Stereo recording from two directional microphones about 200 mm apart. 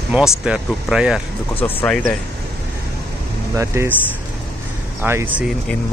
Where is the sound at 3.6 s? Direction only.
15° right (ahead or behind).